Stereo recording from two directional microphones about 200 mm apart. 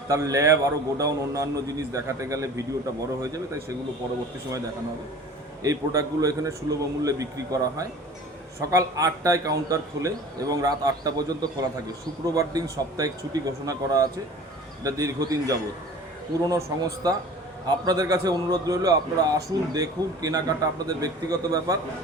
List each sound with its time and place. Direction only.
0.1 s a man's voice: 15° right (ahead or behind)
5.6 s a man's voice: 15° right (ahead or behind)